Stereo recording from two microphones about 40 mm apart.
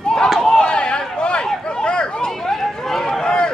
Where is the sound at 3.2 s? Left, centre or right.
Left.